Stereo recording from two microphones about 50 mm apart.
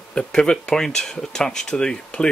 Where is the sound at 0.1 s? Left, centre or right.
Centre.